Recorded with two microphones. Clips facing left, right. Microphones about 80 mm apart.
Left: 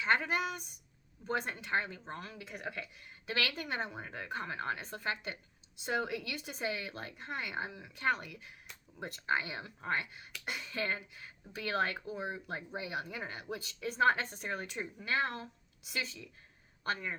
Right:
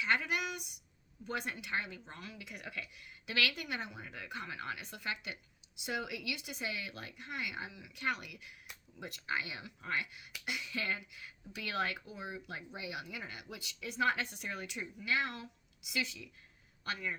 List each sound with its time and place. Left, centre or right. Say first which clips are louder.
0.0 s speech: left 3 dB; left